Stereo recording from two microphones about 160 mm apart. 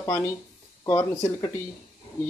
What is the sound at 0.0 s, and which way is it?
Speech, 15° left (ahead or behind).